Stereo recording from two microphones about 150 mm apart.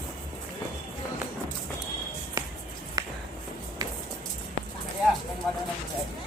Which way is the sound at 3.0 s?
25° right (ahead or behind).